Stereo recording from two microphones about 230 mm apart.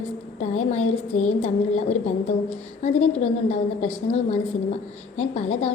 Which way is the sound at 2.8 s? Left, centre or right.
Left.